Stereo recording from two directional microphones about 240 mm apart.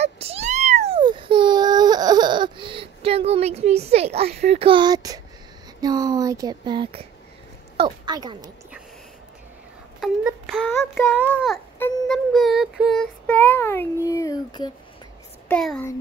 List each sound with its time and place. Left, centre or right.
0.0 s baby cry: right
4.5 s speech: right
9.9 s child singing: centre
11.1 s speech: centre
15.4 s a child's voice: centre